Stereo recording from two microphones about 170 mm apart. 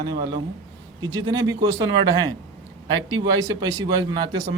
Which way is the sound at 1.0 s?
25° right (ahead or behind).